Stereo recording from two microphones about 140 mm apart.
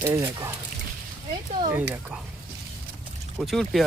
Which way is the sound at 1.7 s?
10° right (ahead or behind).